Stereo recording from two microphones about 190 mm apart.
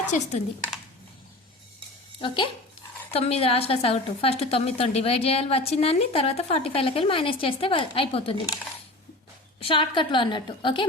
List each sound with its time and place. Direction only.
0.1 s a woman's voice: 35° left (ahead or behind)
2.2 s a woman's voice: 25° left (ahead or behind)
9.6 s a woman's voice: 30° left (ahead or behind)